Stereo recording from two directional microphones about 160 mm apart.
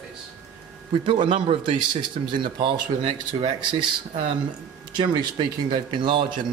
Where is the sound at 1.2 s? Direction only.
30° right (ahead or behind).